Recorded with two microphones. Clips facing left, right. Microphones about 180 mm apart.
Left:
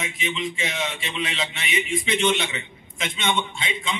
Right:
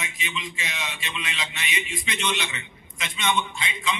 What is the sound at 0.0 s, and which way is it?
A man's voice, 25° left (ahead or behind).